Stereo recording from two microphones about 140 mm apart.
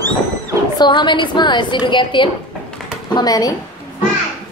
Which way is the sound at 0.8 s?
35° left (ahead or behind).